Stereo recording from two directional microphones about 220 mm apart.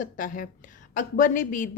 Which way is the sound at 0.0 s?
35° left (ahead or behind).